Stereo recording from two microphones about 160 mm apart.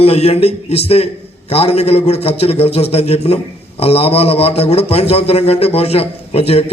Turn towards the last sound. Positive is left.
turn(degrees=40)  # may be behind; listen again after turning